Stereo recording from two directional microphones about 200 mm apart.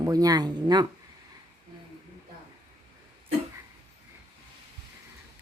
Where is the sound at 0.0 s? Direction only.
20° right (ahead or behind).